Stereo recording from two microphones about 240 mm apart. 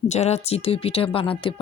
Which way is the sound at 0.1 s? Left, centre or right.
Left.